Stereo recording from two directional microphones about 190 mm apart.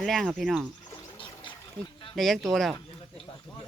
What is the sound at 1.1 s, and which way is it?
Trickle, 25° left (ahead or behind).